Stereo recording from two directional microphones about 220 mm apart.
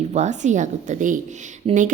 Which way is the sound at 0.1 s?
35° right (ahead or behind).